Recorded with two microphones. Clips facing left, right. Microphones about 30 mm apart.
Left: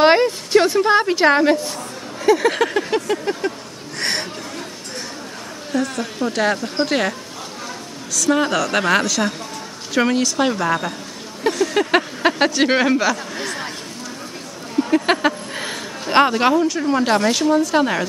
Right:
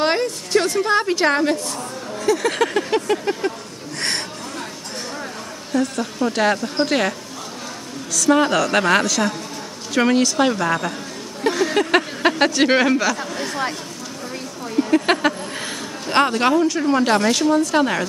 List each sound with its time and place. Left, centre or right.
0.0 s a woman's voice: left
2.2 s a sound: centre
2.5 s a woman's voice: centre
5.7 s a woman's voice: centre
8.2 s a woman's voice: centre
14.8 s speech: centre